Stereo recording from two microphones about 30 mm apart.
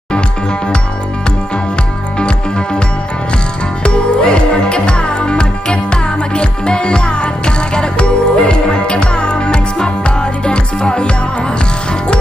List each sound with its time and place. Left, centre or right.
2.1 s music: left
3.8 s music: left